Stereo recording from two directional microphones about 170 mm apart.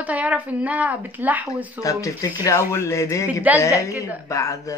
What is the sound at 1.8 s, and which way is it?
A man's voice, 20° left (ahead or behind).